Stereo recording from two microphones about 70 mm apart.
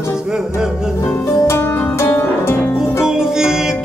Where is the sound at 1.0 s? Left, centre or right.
Left.